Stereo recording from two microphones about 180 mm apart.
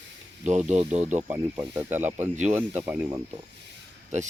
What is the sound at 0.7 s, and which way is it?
Speech, 40° right (ahead or behind).